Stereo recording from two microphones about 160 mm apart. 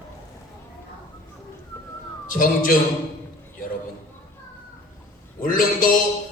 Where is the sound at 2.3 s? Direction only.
60° left (ahead or behind).